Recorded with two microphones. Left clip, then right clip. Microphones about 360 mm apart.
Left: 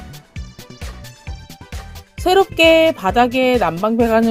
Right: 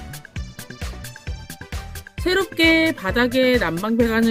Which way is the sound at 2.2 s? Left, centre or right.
Centre.